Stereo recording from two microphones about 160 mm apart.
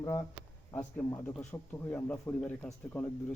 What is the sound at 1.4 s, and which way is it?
Speech, 15° left (ahead or behind).